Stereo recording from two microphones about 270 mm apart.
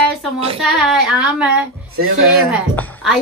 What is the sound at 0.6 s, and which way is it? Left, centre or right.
Speech, centre.